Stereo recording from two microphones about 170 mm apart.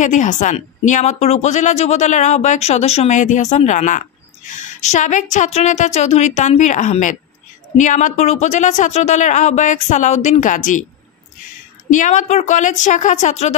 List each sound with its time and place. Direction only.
0.0 s a woman's voice: 45° left (ahead or behind)
11.9 s a woman's voice: 45° left (ahead or behind)